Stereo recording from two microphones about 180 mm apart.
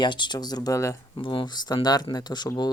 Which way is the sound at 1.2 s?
30° left (ahead or behind).